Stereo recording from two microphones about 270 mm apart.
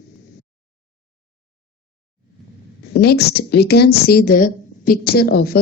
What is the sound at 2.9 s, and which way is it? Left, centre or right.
A woman's voice, left.